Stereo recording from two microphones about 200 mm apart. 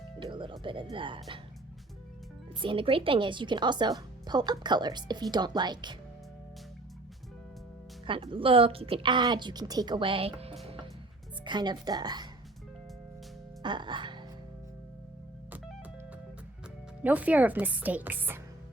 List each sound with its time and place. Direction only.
0.2 s a woman's voice: 25° right (ahead or behind)
2.6 s a woman's voice: 25° right (ahead or behind)
8.0 s a woman's voice: 25° right (ahead or behind)
13.6 s speech: 25° right (ahead or behind)
17.0 s speech: 5° right (ahead or behind)